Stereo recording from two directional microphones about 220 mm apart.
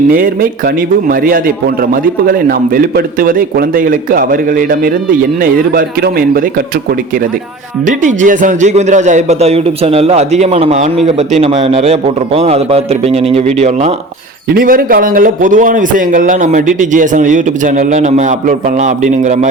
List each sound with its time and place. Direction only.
1.0 s a man's voice: 40° right (ahead or behind)
7.9 s a man's voice: 35° right (ahead or behind)
14.5 s a man's voice: 40° right (ahead or behind)